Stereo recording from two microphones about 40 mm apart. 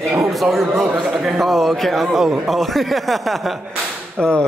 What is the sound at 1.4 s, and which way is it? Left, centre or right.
Speech, centre.